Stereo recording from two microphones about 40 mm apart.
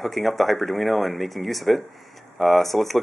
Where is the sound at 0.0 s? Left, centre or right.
Centre.